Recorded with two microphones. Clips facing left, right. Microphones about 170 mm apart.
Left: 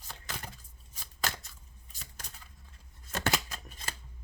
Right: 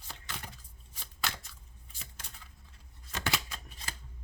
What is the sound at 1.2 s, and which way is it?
Scissors, 40° left (ahead or behind).